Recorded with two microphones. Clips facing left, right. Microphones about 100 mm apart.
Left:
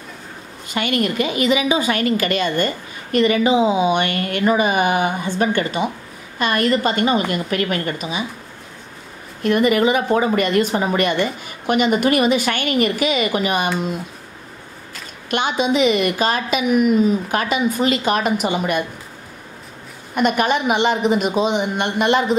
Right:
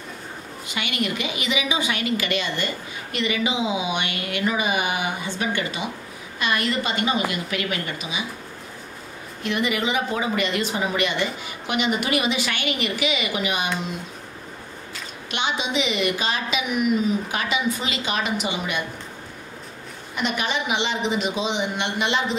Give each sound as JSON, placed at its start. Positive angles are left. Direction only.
{"t": 0.7, "sound": "a woman's voice", "side_deg": 45}
{"t": 9.4, "sound": "a woman's voice", "side_deg": 45}
{"t": 15.2, "sound": "a woman's voice", "side_deg": 45}
{"t": 20.2, "sound": "a woman's voice", "side_deg": 50}